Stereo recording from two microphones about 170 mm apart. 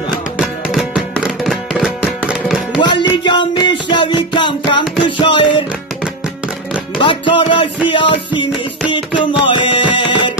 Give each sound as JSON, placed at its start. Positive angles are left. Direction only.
{"t": 0.4, "sound": "music", "side_deg": 0}
{"t": 2.8, "sound": "music", "side_deg": 25}
{"t": 7.0, "sound": "music", "side_deg": 30}